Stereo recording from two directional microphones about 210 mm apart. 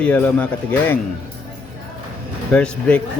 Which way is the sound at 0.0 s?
5° left (ahead or behind).